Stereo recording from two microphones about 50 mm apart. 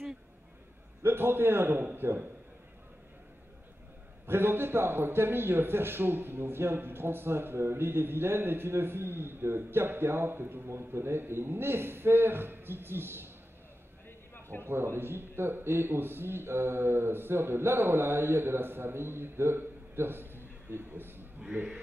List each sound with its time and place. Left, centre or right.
1.0 s a man's voice: right
4.3 s a man's voice: right
14.6 s a man's voice: right